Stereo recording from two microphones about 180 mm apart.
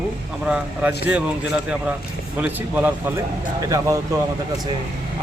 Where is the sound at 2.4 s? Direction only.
10° right (ahead or behind).